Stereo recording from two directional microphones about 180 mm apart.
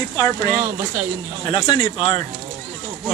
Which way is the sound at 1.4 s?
25° left (ahead or behind).